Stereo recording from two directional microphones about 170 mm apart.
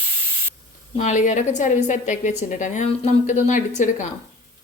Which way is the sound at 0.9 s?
45° left (ahead or behind).